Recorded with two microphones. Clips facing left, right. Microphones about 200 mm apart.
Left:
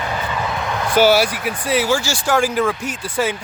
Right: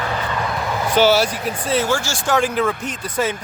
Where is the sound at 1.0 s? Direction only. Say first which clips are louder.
Left 1 dB; 10° left (ahead or behind).